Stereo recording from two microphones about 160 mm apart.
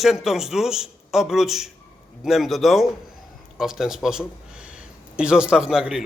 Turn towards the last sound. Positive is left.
turn(degrees=-5)  # may be behind; listen again after turning